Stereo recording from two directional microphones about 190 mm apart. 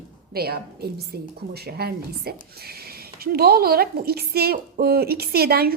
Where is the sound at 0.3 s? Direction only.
55° right (ahead or behind).